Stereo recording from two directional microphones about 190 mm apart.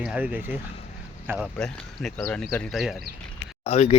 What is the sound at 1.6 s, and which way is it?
Speech, centre (ahead or behind).